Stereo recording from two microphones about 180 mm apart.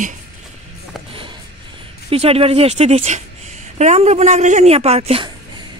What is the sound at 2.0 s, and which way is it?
A woman's voice, 35° right (ahead or behind).